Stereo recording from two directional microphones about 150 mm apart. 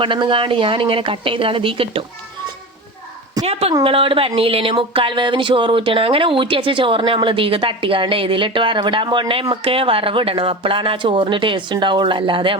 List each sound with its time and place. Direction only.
0.0 s speech: 35° right (ahead or behind)
3.4 s speech: 40° right (ahead or behind)